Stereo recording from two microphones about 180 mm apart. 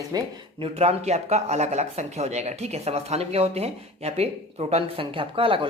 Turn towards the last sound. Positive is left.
turn(degrees=-30)  # may be behind; listen again after turning